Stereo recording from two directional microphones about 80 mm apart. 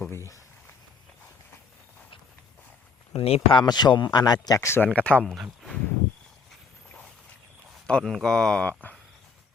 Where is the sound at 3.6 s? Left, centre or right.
Left.